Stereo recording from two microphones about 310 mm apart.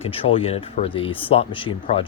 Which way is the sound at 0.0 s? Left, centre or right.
Centre.